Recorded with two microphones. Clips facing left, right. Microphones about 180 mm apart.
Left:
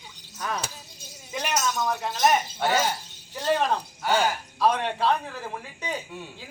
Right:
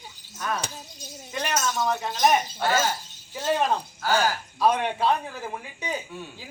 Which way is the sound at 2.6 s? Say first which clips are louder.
Even; 20° left (ahead or behind).